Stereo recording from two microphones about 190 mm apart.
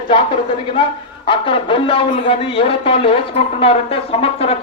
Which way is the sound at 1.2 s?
25° left (ahead or behind).